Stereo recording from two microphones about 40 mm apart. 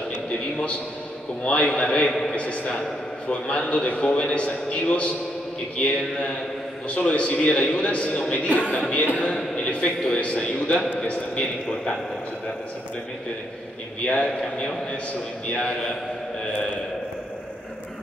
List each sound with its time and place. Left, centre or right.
1.4 s a man's voice: left
14.0 s a man's voice: left